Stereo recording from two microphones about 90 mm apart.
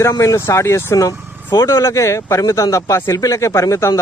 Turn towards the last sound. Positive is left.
turn(degrees=35)  # may be behind; listen again after turning